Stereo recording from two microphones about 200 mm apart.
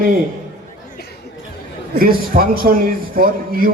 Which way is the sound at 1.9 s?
45° right (ahead or behind).